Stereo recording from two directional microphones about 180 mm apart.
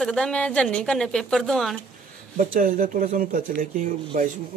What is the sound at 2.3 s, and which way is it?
Speech, 45° right (ahead or behind).